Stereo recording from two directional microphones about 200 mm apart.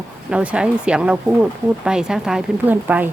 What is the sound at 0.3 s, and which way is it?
A woman's voice, 5° right (ahead or behind).